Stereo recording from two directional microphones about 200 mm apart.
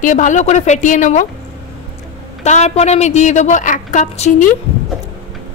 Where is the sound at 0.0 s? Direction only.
40° left (ahead or behind).